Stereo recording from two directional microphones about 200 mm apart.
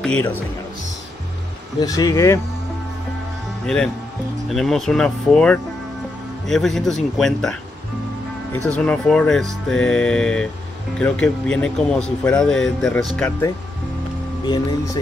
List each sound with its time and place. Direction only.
0.0 s speech: 5° left (ahead or behind)
1.8 s speech: 20° left (ahead or behind)
3.6 s speech: 5° left (ahead or behind)
8.5 s speech: 5° left (ahead or behind)